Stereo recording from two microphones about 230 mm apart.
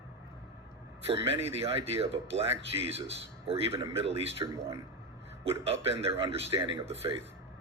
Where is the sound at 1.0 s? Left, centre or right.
Right.